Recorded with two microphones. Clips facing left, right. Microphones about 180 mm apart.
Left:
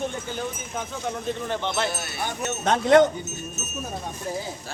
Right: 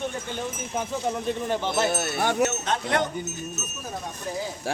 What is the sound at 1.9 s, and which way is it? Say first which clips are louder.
Speech: right 6 dB; 55° right (ahead or behind).